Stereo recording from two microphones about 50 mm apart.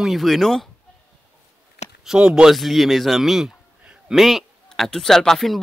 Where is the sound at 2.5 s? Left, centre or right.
Centre.